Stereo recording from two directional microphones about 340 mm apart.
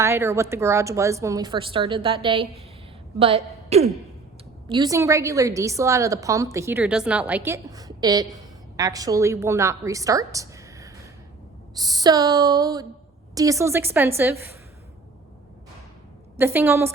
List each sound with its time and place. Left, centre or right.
0.0 s a woman's voice: centre
16.4 s a woman's voice: centre